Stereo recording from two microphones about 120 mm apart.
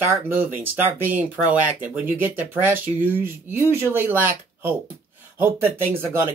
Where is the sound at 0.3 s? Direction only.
15° right (ahead or behind).